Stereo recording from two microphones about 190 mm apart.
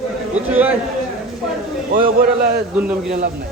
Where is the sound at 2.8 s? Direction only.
10° right (ahead or behind).